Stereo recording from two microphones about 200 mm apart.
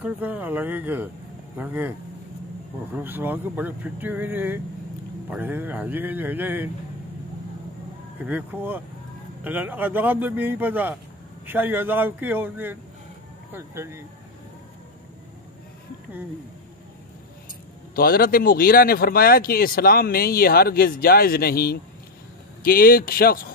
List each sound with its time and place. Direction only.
0.0 s speech: 10° right (ahead or behind)
3.0 s speech: 10° right (ahead or behind)
8.2 s speech: 10° right (ahead or behind)
17.9 s speech: 45° left (ahead or behind)